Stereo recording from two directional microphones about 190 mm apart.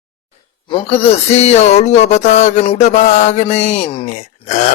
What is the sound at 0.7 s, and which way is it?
Speech, 30° left (ahead or behind).